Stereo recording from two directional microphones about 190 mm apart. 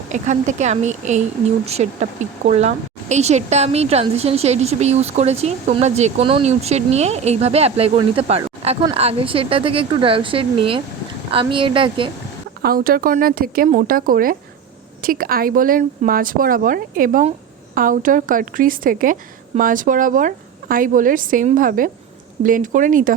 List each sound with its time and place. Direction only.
0.1 s a woman's voice: 40° right (ahead or behind)
12.6 s a woman's voice: 50° right (ahead or behind)